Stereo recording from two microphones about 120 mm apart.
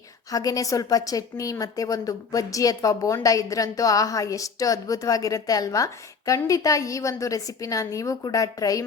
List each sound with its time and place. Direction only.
0.3 s a woman's voice: 30° left (ahead or behind)